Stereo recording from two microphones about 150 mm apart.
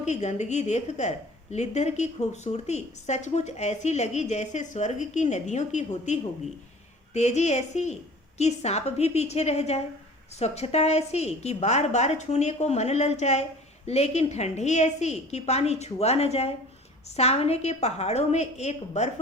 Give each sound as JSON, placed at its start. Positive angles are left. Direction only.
{"t": 0.0, "sound": "a woman's voice", "side_deg": 50}